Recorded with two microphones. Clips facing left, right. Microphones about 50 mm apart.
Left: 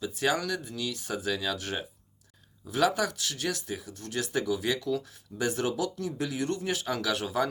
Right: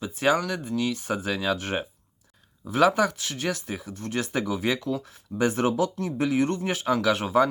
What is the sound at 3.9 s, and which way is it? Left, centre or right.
Speech, right.